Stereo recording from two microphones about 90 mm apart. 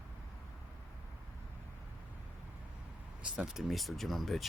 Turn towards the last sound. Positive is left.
turn(degrees=0)  # may be behind; listen again after turning